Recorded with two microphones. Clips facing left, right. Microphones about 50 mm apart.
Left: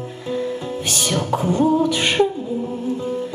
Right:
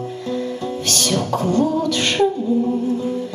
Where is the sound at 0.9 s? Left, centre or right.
Centre.